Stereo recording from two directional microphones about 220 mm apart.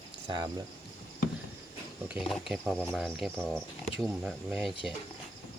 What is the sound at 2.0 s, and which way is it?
Speech, 5° right (ahead or behind).